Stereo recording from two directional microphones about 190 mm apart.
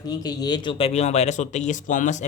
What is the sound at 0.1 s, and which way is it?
Speech, 20° left (ahead or behind).